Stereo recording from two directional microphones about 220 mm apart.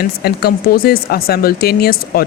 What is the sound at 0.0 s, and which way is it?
A woman's voice, 45° left (ahead or behind).